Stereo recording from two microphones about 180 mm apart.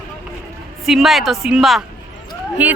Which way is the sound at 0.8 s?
Centre (ahead or behind).